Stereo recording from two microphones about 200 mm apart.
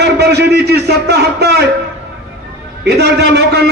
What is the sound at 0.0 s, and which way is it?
A man's voice, 55° right (ahead or behind).